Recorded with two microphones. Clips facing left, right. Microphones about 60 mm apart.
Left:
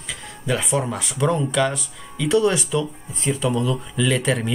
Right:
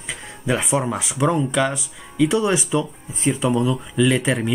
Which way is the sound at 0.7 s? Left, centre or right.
Centre.